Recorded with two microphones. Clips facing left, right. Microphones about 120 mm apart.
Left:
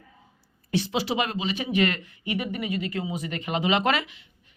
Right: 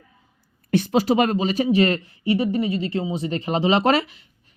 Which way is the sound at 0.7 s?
50° right (ahead or behind).